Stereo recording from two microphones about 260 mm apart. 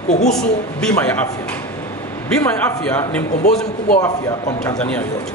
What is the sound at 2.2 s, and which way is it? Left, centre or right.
Speech, centre.